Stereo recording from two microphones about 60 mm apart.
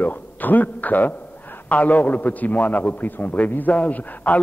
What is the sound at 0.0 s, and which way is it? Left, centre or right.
A man's voice, left.